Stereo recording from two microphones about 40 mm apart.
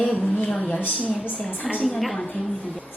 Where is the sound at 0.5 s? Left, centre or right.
Left.